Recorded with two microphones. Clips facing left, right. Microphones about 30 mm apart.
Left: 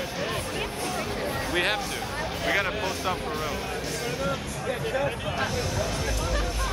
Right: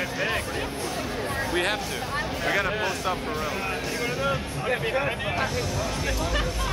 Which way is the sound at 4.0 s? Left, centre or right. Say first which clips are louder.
Right 3 dB; right.